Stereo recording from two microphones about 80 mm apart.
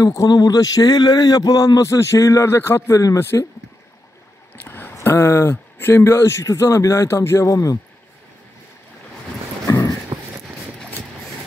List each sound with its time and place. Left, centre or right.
0.3 s a man's voice: left
3.2 s speech: left
4.6 s speech: left
9.7 s clip-clop: left